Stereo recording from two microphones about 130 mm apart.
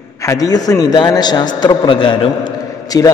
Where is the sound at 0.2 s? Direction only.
25° left (ahead or behind).